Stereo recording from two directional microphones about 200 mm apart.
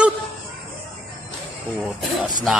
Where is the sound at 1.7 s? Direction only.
5° right (ahead or behind).